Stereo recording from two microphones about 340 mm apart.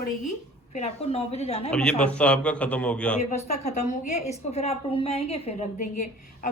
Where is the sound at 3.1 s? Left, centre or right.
Centre.